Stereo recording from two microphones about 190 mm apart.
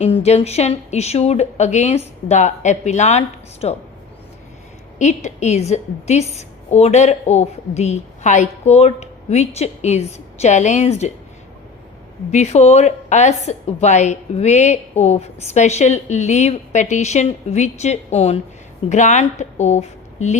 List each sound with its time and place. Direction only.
0.0 s a woman's voice: 35° left (ahead or behind)
4.9 s a woman's voice: 40° left (ahead or behind)
12.3 s a woman's voice: 35° left (ahead or behind)